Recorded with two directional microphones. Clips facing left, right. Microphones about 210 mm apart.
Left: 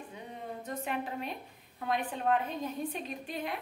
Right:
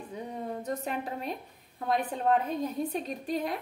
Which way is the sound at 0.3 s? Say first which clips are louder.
Right 6 dB; 40° right (ahead or behind).